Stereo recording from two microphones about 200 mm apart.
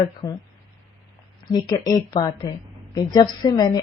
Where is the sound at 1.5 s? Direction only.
20° left (ahead or behind).